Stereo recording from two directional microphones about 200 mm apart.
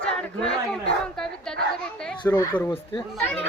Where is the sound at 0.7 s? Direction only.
5° left (ahead or behind).